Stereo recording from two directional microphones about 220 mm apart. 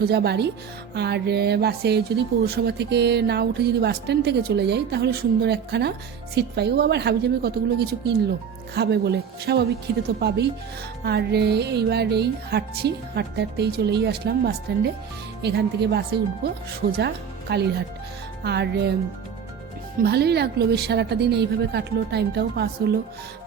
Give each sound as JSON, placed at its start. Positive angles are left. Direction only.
{"t": 0.0, "sound": "speech", "side_deg": -45}
{"t": 17.5, "sound": "speech", "side_deg": -50}
{"t": 20.0, "sound": "speech", "side_deg": -45}